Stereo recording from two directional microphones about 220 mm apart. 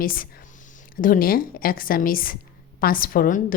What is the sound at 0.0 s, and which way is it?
Speech, 40° left (ahead or behind).